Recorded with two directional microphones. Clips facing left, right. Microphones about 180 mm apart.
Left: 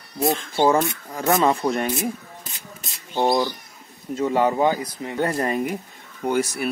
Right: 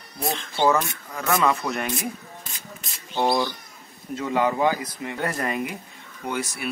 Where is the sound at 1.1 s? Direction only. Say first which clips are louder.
Left 3 dB; 30° left (ahead or behind).